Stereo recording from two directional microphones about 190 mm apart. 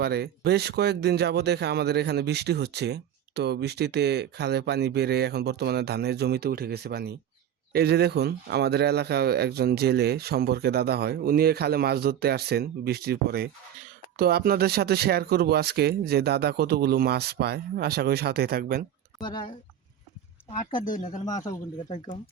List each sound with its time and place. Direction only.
0.0 s speech: 55° right (ahead or behind)
20.5 s speech: 45° left (ahead or behind)
21.2 s speech: 20° left (ahead or behind)